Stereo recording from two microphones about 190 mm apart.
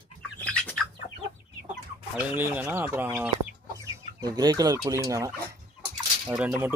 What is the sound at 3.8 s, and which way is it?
Chicken, 20° right (ahead or behind).